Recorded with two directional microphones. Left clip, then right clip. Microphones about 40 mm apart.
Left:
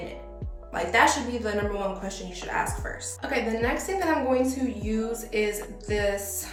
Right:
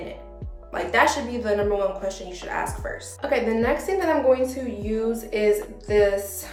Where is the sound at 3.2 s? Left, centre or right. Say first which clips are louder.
Right 5 dB; right.